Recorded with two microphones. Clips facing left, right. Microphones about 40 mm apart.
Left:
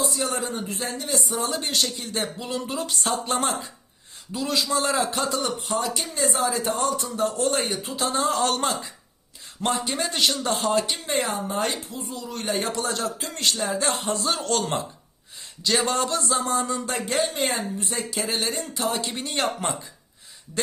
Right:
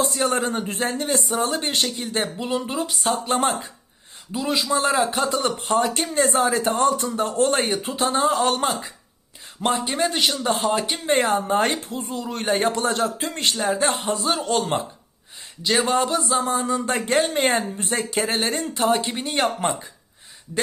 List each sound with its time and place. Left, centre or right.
0.0 s speech: right; by 2.9 s centre
2.9 s speech: centre
4.3 s speech: centre
5.4 s speech: right
8.1 s speech: centre
10.8 s speech: right
11.1 s speech: right
14.0 s speech: centre
16.8 s speech: right; by 19.9 s centre